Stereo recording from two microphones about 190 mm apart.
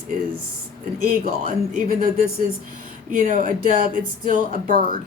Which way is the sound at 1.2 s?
50° right (ahead or behind).